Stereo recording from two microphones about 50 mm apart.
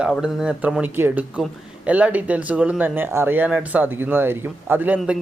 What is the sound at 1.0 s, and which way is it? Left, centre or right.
Speech, right.